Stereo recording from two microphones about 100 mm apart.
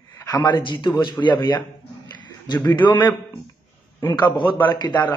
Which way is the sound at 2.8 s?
50° left (ahead or behind).